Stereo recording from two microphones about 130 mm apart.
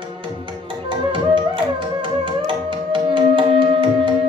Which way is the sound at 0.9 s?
40° right (ahead or behind).